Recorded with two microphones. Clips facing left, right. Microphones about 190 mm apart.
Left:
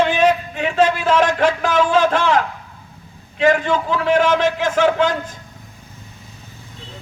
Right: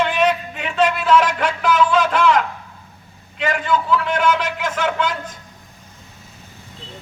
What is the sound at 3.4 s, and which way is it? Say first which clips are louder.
Speech: left 7 dB; 40° left (ahead or behind).